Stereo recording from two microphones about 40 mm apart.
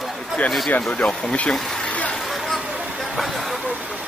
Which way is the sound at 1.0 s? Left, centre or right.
Centre.